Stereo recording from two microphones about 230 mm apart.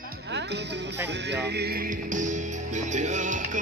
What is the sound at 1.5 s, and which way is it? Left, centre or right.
Music, right.